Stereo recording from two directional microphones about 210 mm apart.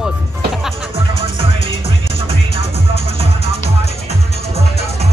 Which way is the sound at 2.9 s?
50° left (ahead or behind).